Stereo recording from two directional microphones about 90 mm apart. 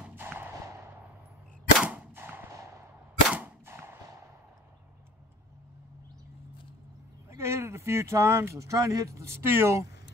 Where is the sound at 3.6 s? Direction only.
30° right (ahead or behind).